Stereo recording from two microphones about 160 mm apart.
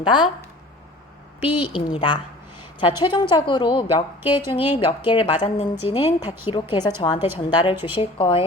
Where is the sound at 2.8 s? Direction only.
30° left (ahead or behind).